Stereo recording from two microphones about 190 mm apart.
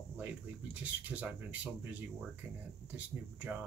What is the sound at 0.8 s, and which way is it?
Speech, 5° right (ahead or behind).